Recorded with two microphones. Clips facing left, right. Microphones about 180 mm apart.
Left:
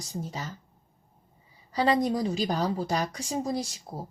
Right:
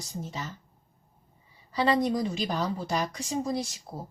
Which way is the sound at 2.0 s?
35° left (ahead or behind).